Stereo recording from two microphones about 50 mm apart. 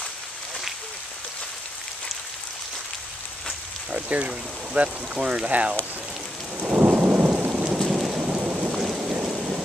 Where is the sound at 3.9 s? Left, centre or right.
Right.